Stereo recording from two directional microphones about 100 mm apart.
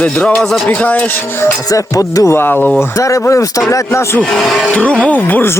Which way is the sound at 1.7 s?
35° left (ahead or behind).